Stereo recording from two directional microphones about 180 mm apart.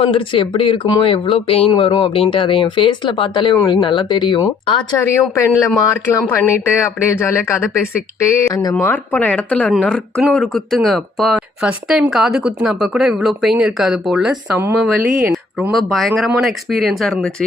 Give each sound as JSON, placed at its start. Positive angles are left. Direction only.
{"t": 0.0, "sound": "speech", "side_deg": 30}
{"t": 5.3, "sound": "speech", "side_deg": 15}
{"t": 8.7, "sound": "speech", "side_deg": 5}
{"t": 14.6, "sound": "a woman's voice", "side_deg": -15}
{"t": 15.7, "sound": "speech", "side_deg": 0}